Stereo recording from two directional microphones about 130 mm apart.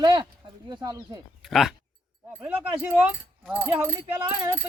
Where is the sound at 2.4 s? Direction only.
10° right (ahead or behind).